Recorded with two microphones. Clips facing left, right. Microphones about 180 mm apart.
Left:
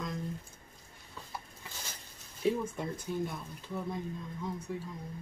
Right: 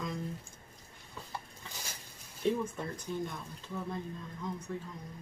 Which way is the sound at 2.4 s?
10° left (ahead or behind).